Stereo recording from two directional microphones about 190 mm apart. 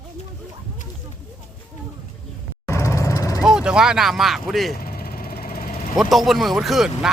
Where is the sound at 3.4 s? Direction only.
5° right (ahead or behind).